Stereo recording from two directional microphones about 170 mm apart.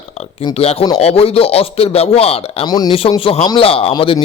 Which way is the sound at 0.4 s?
35° left (ahead or behind).